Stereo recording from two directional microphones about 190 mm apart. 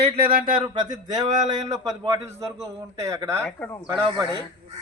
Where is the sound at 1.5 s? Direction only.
20° right (ahead or behind).